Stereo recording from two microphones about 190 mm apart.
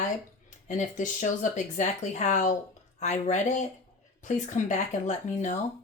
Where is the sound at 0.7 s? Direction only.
40° left (ahead or behind).